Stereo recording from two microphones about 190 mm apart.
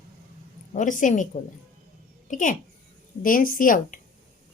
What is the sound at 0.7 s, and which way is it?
Speech, 40° left (ahead or behind).